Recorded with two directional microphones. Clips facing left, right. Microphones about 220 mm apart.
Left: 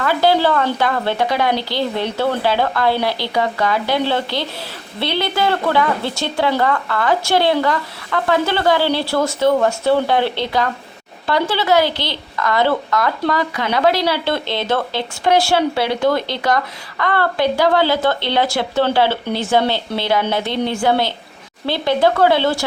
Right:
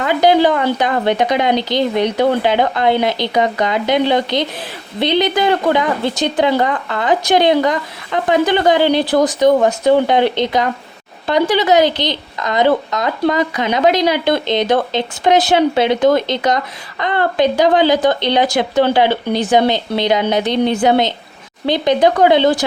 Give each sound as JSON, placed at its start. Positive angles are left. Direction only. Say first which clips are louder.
{"t": 0.0, "sound": "a woman's voice", "louder": "right 3 dB", "side_deg": -20}